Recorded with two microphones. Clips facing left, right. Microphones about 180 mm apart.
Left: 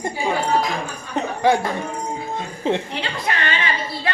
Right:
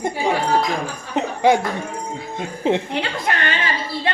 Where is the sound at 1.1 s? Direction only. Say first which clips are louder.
Right 2 dB; 20° right (ahead or behind).